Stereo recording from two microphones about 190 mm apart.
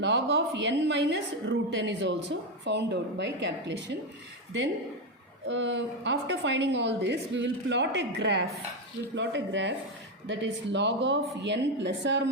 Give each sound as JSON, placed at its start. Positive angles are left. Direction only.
{"t": 0.0, "sound": "a woman's voice", "side_deg": -70}
{"t": 5.5, "sound": "a woman's voice", "side_deg": -70}